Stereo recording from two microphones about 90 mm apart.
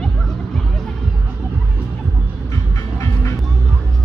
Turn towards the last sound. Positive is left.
turn(degrees=35)  # may be behind; listen again after turning